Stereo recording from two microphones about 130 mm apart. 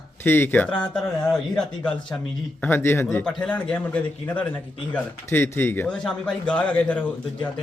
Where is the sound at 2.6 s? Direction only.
15° left (ahead or behind).